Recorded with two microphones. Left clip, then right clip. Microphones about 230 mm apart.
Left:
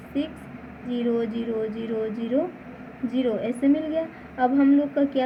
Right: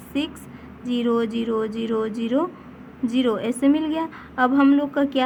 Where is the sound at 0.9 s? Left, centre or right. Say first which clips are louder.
Right 3 dB; right.